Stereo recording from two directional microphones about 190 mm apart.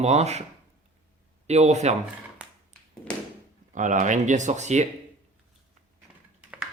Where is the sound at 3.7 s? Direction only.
40° right (ahead or behind).